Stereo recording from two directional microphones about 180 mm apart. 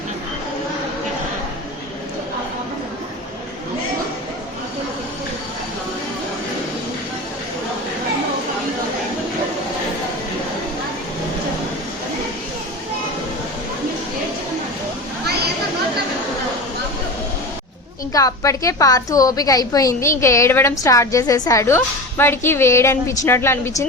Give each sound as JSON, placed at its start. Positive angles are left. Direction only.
{"t": 18.1, "sound": "a woman's voice", "side_deg": 20}